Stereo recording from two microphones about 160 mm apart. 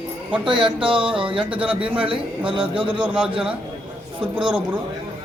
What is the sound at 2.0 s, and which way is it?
A man's voice, 35° right (ahead or behind).